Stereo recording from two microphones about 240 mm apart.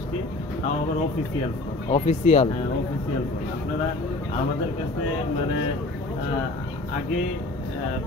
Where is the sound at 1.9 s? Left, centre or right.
Left.